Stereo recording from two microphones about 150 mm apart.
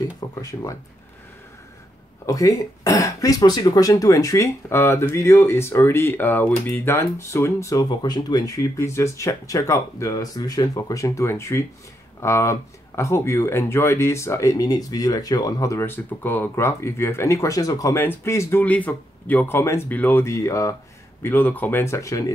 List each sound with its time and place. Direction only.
0.4 s speech: 25° left (ahead or behind)
2.2 s speech: 20° left (ahead or behind)